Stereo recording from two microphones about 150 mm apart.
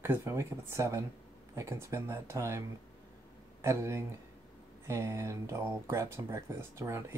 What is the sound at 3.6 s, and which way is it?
A man's voice, 20° right (ahead or behind).